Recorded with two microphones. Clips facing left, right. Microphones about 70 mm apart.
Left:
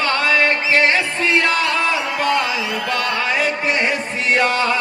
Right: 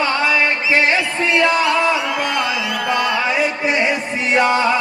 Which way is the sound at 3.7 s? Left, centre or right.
Left.